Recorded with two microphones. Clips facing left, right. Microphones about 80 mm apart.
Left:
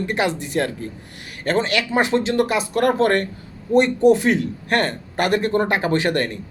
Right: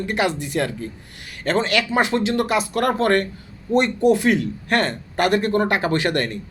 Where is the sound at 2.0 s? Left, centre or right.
Left.